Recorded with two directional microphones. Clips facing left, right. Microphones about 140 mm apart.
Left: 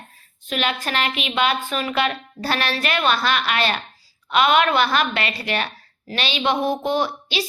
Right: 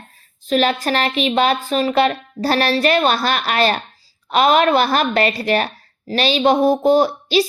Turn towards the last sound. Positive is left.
turn(degrees=-40)  # may be behind; listen again after turning